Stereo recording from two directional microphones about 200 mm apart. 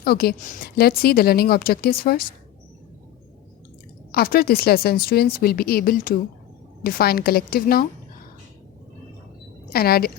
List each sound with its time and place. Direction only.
0.0 s a woman's voice: 50° left (ahead or behind)
4.1 s a woman's voice: 50° left (ahead or behind)
9.7 s a woman's voice: 50° left (ahead or behind)